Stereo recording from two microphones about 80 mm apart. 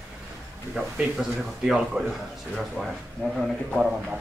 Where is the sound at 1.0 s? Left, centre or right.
Centre.